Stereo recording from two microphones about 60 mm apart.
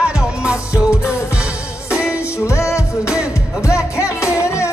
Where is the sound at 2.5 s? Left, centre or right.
Left.